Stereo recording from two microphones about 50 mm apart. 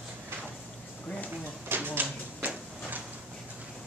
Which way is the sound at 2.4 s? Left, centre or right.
Right.